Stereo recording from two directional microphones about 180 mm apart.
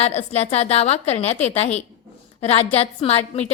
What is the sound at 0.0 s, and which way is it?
A woman's voice, 40° left (ahead or behind).